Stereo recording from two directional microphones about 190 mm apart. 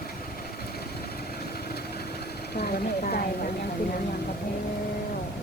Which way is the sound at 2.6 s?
55° left (ahead or behind).